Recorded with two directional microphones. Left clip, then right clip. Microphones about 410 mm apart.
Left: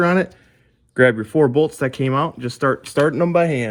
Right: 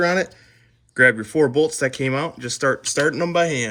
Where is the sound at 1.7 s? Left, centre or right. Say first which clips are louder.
Even; left.